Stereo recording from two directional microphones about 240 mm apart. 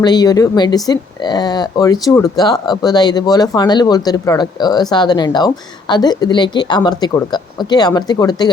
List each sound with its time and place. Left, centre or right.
0.0 s speech: centre